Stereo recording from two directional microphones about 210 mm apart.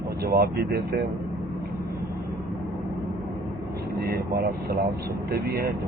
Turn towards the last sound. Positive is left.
turn(degrees=-50)  # may be behind; listen again after turning